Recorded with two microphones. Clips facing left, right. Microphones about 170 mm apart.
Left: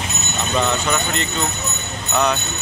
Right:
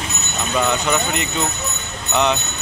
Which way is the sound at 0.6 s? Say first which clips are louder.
Right 2 dB; 10° right (ahead or behind).